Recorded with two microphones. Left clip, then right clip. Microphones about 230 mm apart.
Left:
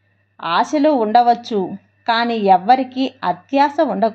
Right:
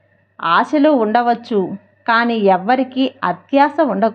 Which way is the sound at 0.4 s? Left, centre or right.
Centre.